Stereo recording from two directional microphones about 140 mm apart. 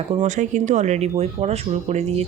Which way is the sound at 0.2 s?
60° right (ahead or behind).